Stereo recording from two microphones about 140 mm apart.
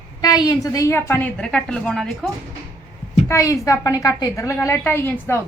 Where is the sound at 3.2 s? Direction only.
20° left (ahead or behind).